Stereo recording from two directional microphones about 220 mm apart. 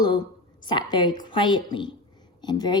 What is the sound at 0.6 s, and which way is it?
A woman's voice, 20° left (ahead or behind).